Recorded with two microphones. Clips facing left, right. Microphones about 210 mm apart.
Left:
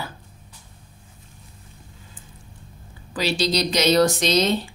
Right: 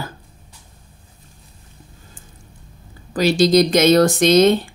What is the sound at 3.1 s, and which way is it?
Speech, 45° right (ahead or behind).